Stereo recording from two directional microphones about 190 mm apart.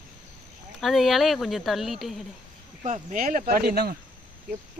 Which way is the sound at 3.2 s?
50° right (ahead or behind).